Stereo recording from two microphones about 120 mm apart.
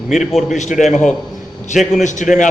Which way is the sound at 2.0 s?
90° left.